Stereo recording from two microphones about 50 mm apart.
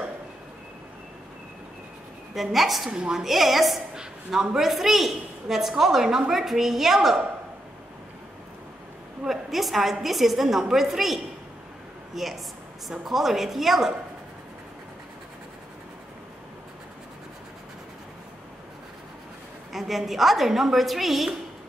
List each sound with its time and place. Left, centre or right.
2.3 s a woman's voice: centre
2.9 s a woman's voice: centre
3.3 s a woman's voice: centre
9.2 s a woman's voice: centre
19.7 s a woman's voice: centre